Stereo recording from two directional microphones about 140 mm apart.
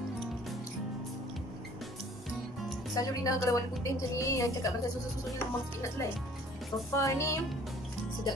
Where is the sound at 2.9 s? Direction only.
25° left (ahead or behind).